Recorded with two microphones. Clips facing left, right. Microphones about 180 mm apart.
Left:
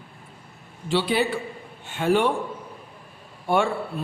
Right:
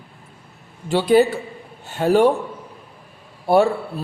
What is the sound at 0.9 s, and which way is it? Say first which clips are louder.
A man's voice: right 7 dB; 45° right (ahead or behind).